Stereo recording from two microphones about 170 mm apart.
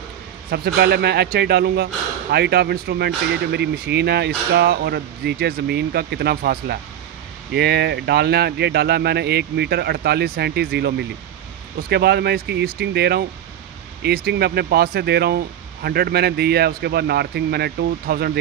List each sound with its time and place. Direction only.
0.5 s speech: 70° right (ahead or behind)
7.5 s speech: 75° right (ahead or behind)